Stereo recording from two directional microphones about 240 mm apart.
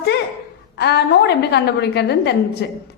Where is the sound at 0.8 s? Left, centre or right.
Left.